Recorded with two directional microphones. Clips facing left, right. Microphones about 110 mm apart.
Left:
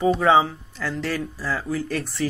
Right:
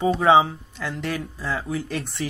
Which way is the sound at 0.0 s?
25° right (ahead or behind).